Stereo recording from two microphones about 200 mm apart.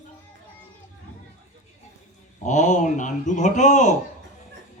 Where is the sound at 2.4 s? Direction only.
40° left (ahead or behind).